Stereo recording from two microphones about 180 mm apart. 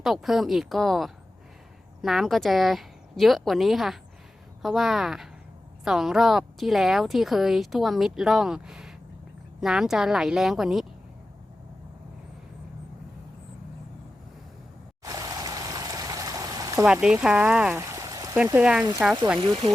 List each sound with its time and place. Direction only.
0.0 s a woman's voice: centre (ahead or behind)
15.0 s a sound: 20° right (ahead or behind)
16.8 s a woman's voice: 5° right (ahead or behind)
17.8 s a sound: 20° right (ahead or behind)
18.6 s a woman's voice: 5° right (ahead or behind)
19.4 s speech: 25° right (ahead or behind)